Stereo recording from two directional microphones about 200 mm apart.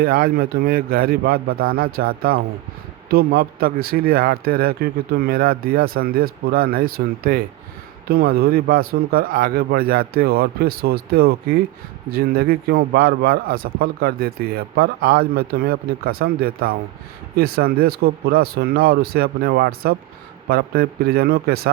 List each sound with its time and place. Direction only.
0.0 s a man's voice: 50° right (ahead or behind)